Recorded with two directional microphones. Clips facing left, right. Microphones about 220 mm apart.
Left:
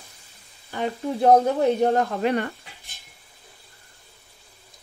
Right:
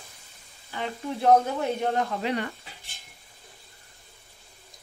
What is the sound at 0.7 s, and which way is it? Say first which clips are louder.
Sizzle: left 6 dB; 45° left (ahead or behind).